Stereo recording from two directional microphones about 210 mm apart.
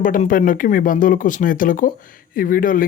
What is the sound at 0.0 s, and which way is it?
Speech, 40° left (ahead or behind).